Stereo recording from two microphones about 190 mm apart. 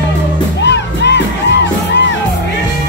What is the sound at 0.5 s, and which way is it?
Music, 65° left (ahead or behind).